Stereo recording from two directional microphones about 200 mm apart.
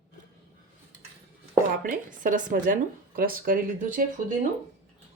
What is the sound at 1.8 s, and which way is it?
Speech, 40° right (ahead or behind).